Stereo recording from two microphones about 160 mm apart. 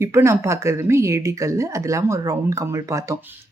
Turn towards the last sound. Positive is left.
turn(degrees=-20)  # may be behind; listen again after turning